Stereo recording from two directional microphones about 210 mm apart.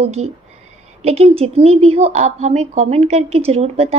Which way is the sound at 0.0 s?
30° right (ahead or behind).